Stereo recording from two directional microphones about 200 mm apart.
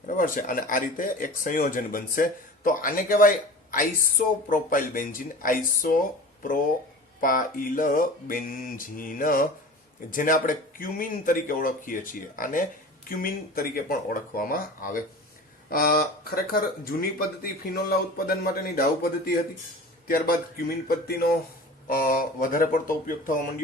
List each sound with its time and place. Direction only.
0.1 s speech: 40° left (ahead or behind)
7.2 s a man's voice: 45° left (ahead or behind)